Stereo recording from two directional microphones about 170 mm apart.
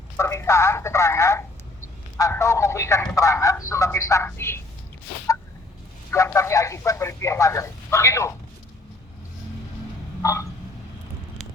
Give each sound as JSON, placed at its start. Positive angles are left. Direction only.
{"t": 0.2, "sound": "speech", "side_deg": 15}
{"t": 6.1, "sound": "speech", "side_deg": 15}
{"t": 10.2, "sound": "speech", "side_deg": 15}